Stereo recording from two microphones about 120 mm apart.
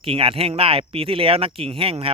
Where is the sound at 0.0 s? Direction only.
50° right (ahead or behind).